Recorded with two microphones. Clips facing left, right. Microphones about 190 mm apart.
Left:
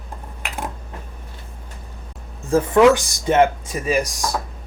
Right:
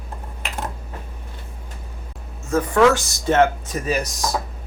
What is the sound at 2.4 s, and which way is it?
Speech, 30° left (ahead or behind).